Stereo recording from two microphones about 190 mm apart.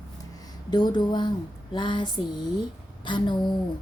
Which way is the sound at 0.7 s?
20° left (ahead or behind).